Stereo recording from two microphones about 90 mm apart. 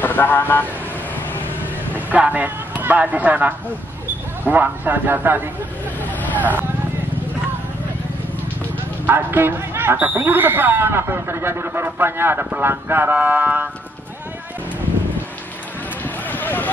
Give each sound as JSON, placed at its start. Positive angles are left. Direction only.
{"t": 0.0, "sound": "speech", "side_deg": 20}
{"t": 2.0, "sound": "speech", "side_deg": -20}
{"t": 9.0, "sound": "speech", "side_deg": -25}
{"t": 16.3, "sound": "a sound", "side_deg": 20}